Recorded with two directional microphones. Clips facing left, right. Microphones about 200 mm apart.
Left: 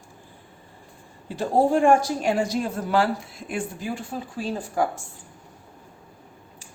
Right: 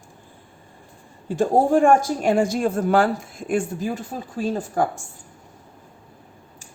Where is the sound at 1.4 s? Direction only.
50° right (ahead or behind).